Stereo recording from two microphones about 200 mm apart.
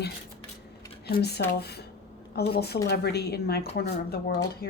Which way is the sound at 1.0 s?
55° left (ahead or behind).